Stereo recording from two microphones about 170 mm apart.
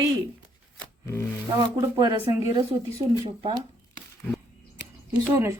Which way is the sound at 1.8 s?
25° right (ahead or behind).